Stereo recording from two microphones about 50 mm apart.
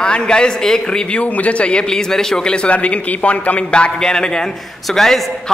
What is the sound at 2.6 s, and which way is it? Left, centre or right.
A man's voice, left.